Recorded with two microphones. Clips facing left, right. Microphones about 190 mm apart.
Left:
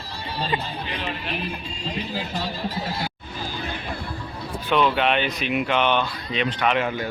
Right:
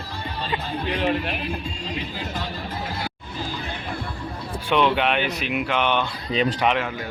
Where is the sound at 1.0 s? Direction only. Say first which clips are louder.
Right 11 dB; 55° right (ahead or behind).